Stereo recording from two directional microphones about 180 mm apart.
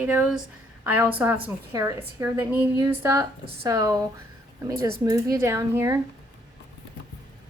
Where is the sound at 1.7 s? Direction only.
20° right (ahead or behind).